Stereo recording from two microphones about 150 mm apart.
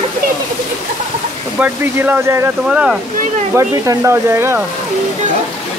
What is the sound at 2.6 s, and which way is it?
Speech, 5° right (ahead or behind).